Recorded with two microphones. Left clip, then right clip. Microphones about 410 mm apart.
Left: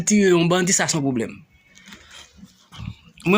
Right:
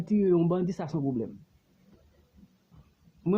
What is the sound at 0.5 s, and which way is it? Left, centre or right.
Speech, right.